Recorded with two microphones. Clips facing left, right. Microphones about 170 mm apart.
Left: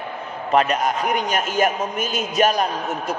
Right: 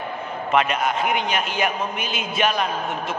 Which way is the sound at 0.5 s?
40° left (ahead or behind).